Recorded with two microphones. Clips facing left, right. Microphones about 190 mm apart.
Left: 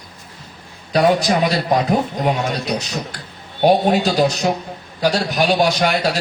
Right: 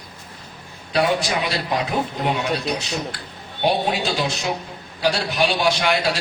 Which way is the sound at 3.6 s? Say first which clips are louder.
Left 6 dB; 40° left (ahead or behind).